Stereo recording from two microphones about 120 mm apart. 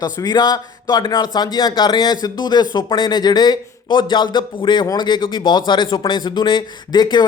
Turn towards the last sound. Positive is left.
turn(degrees=35)  # may be behind; listen again after turning